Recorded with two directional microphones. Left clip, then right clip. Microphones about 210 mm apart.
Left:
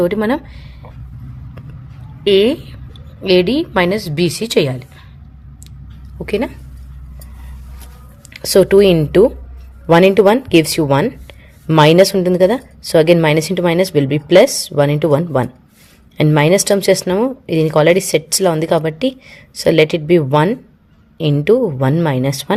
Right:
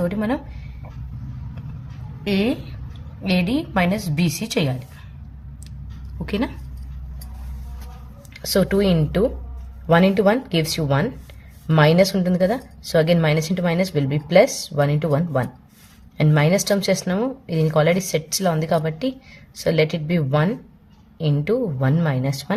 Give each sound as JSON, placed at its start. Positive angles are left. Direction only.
{"t": 0.0, "sound": "a woman's voice", "side_deg": 45}
{"t": 2.2, "sound": "a woman's voice", "side_deg": 45}
{"t": 6.2, "sound": "a woman's voice", "side_deg": 25}
{"t": 8.3, "sound": "speech", "side_deg": 35}